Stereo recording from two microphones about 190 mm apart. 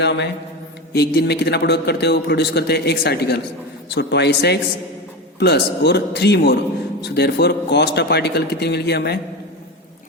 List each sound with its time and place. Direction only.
0.0 s a man's voice: 65° left (ahead or behind)